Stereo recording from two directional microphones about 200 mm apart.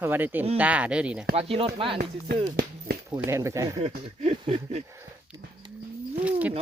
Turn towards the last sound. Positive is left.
turn(degrees=-5)  # may be behind; listen again after turning